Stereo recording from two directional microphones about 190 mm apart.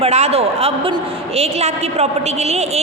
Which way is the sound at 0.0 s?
35° right (ahead or behind).